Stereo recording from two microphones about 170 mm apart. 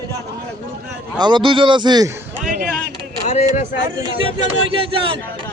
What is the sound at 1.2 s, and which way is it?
Speech, 30° right (ahead or behind).